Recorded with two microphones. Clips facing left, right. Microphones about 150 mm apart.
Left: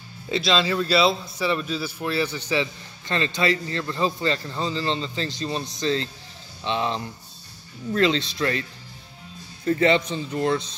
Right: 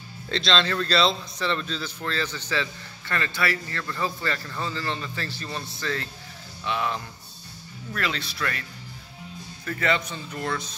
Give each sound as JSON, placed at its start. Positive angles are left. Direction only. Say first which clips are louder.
{"t": 0.3, "sound": "a man's voice", "louder": "left 2 dB", "side_deg": 5}
{"t": 9.7, "sound": "a man's voice", "louder": "left 7 dB", "side_deg": 25}